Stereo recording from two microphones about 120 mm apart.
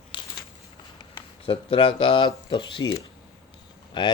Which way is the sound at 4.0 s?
40° left (ahead or behind).